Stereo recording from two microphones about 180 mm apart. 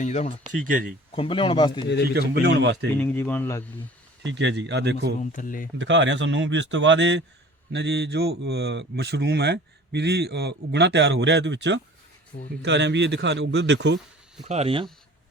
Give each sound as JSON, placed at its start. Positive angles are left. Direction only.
{"t": 0.0, "sound": "speech", "side_deg": 40}
{"t": 0.6, "sound": "speech", "side_deg": -50}
{"t": 1.1, "sound": "speech", "side_deg": 30}
{"t": 2.1, "sound": "speech", "side_deg": -70}
{"t": 2.9, "sound": "speech", "side_deg": 10}
{"t": 4.3, "sound": "speech", "side_deg": -75}
{"t": 5.2, "sound": "speech", "side_deg": 45}
{"t": 5.8, "sound": "speech", "side_deg": -90}
{"t": 7.7, "sound": "speech", "side_deg": -70}
{"t": 14.4, "sound": "speech", "side_deg": -35}